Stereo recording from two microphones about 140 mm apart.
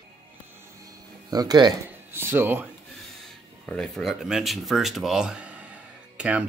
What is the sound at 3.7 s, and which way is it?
Speech, 5° left (ahead or behind).